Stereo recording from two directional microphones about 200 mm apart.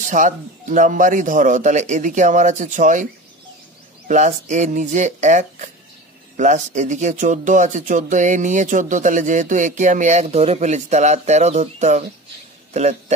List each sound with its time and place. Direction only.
0.0 s speech: 40° right (ahead or behind)
4.1 s speech: 35° right (ahead or behind)